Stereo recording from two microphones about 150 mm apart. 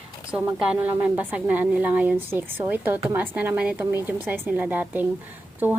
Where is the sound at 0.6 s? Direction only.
10° right (ahead or behind).